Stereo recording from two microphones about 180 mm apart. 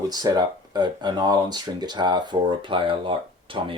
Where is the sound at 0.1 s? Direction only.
20° right (ahead or behind).